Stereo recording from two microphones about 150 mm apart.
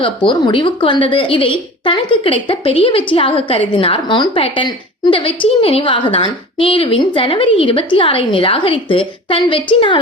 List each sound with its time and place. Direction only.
0.3 s a woman's voice: 35° left (ahead or behind)